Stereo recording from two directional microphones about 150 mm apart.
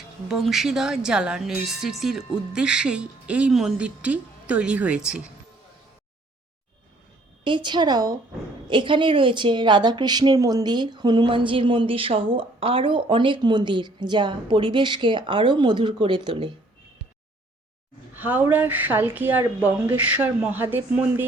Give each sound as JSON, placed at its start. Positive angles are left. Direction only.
{"t": 0.3, "sound": "a woman's voice", "side_deg": 0}
{"t": 7.4, "sound": "a woman's voice", "side_deg": -30}
{"t": 18.1, "sound": "a woman's voice", "side_deg": -10}